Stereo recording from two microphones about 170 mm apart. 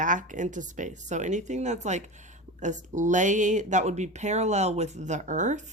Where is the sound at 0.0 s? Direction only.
50° right (ahead or behind).